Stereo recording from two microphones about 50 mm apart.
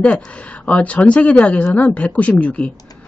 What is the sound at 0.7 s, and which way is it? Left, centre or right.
Speech, left.